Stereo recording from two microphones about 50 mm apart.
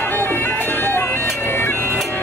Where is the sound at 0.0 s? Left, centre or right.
Left.